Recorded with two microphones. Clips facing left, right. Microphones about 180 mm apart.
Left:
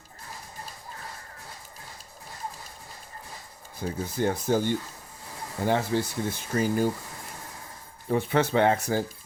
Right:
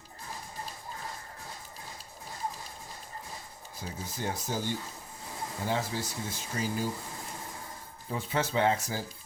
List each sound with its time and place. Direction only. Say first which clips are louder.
3.8 s speech: left 10 dB; 55° left (ahead or behind)
8.1 s speech: left 7 dB; 65° left (ahead or behind)